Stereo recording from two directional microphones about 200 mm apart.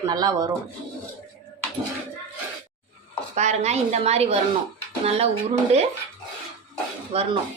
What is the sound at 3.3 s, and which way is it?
A woman's voice, 35° right (ahead or behind).